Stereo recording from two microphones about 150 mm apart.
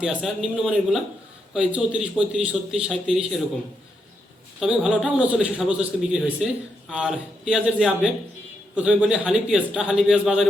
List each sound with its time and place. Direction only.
0.0 s a man's voice: 5° right (ahead or behind)
4.6 s a man's voice: 5° right (ahead or behind)